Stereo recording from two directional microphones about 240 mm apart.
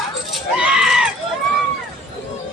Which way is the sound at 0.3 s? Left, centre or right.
Centre.